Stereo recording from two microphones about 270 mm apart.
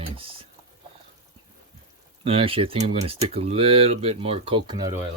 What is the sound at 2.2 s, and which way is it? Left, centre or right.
Speech, right.